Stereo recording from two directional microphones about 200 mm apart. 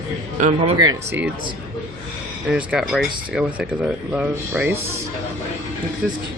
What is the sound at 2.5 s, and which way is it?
Speech, 5° right (ahead or behind).